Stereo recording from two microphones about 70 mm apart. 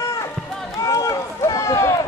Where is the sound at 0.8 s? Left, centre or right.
Left.